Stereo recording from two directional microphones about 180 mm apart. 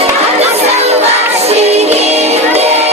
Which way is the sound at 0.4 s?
35° right (ahead or behind).